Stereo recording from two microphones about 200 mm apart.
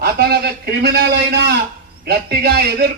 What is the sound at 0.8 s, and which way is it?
A man's voice, 55° right (ahead or behind).